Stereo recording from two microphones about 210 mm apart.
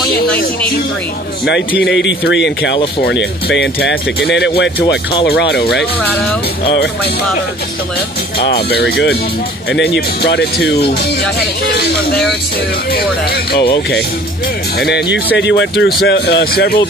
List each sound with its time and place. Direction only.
1.8 s speech: 60° left (ahead or behind)
8.6 s speech: 50° left (ahead or behind)
12.9 s speech: 50° left (ahead or behind)
14.8 s speech: 50° left (ahead or behind)